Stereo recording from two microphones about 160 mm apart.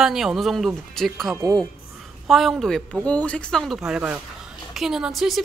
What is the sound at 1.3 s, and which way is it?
Speech, 20° right (ahead or behind).